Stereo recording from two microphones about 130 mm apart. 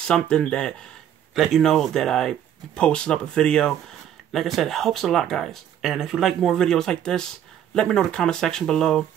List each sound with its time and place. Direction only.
0.0 s speech: 5° left (ahead or behind)